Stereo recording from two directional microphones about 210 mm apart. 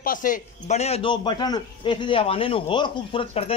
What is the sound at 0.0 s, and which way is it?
Speech, 40° left (ahead or behind).